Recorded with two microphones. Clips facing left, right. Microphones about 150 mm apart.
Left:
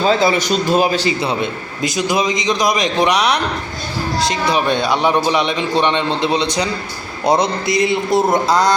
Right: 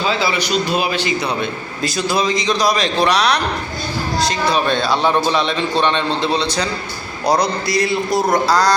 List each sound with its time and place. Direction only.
0.0 s a man's voice: 45° left (ahead or behind)
1.2 s speech: 25° left (ahead or behind)